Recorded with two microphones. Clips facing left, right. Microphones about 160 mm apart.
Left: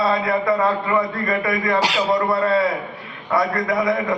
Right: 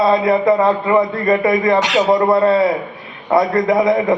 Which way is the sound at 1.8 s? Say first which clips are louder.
Right 5 dB; 35° left (ahead or behind).